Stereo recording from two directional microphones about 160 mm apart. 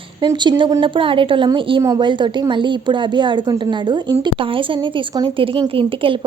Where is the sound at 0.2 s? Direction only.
30° right (ahead or behind).